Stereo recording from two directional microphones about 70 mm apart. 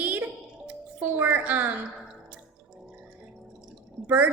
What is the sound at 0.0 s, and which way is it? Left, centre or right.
Music, right.